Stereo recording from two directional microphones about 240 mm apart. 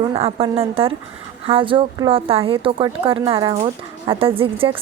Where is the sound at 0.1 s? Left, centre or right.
Right.